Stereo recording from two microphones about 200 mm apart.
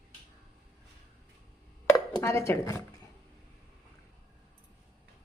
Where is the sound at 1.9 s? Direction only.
15° left (ahead or behind).